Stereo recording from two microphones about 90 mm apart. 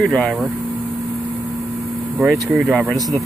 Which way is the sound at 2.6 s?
Centre (ahead or behind).